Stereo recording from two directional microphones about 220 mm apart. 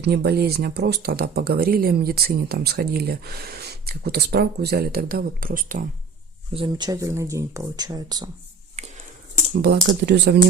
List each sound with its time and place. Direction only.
0.0 s speech: 45° right (ahead or behind)
6.5 s speech: 20° right (ahead or behind)
8.8 s a sound: 30° right (ahead or behind)
9.6 s speech: 50° right (ahead or behind)